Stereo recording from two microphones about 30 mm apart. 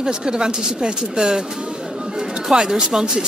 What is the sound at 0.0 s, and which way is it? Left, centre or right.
Speech, right.